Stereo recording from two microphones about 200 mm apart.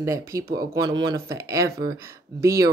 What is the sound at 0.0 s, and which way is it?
Speech, 15° right (ahead or behind).